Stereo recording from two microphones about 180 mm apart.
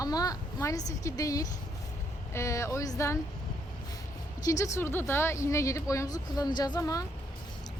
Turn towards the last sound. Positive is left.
turn(degrees=20)  # may be behind; listen again after turning